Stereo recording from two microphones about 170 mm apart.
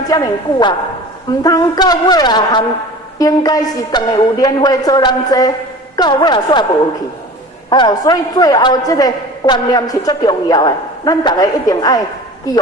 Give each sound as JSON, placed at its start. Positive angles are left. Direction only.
{"t": 0.1, "sound": "a man's voice", "side_deg": 20}
{"t": 7.7, "sound": "a man's voice", "side_deg": 25}